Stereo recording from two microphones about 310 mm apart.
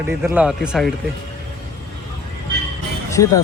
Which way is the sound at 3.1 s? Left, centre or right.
Centre.